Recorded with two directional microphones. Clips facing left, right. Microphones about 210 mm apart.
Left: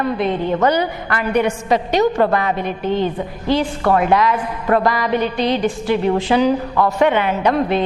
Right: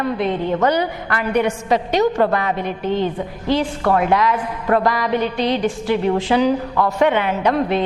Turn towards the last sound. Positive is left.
turn(degrees=15)  # may be behind; listen again after turning